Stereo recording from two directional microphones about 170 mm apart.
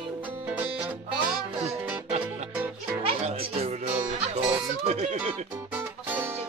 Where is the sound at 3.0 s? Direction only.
35° right (ahead or behind).